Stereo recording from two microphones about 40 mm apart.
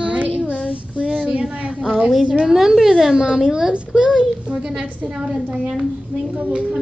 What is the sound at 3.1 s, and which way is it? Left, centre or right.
A child's voice, centre.